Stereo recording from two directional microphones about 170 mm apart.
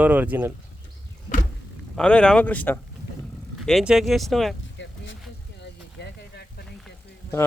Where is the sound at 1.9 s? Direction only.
5° left (ahead or behind).